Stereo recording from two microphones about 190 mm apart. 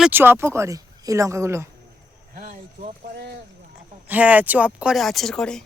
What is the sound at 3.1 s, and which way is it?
Speech, 60° right (ahead or behind).